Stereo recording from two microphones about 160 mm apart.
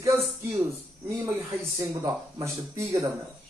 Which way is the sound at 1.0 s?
15° right (ahead or behind).